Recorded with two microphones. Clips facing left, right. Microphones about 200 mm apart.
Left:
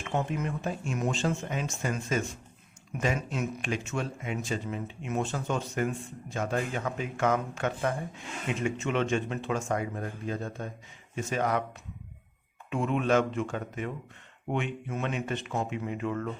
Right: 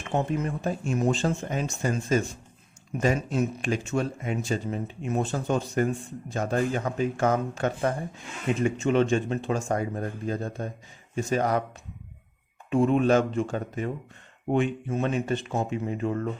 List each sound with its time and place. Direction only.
0.1 s speech: 35° right (ahead or behind)
12.7 s speech: 35° right (ahead or behind)